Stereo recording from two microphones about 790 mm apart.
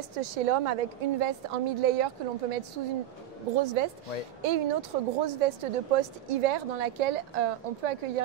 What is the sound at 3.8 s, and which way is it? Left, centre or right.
A woman's voice, right.